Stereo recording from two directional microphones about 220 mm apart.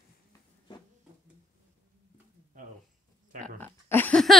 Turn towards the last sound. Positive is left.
turn(degrees=5)  # may be behind; listen again after turning